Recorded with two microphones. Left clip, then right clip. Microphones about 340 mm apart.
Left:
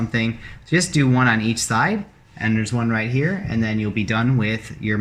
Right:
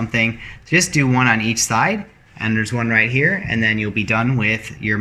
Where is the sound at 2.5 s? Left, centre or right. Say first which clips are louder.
Right 9 dB; right.